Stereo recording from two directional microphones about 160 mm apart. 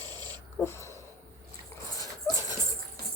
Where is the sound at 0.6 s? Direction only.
15° left (ahead or behind).